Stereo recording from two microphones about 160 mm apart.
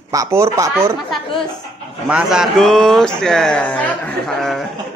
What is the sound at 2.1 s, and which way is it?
Speech, 5° right (ahead or behind).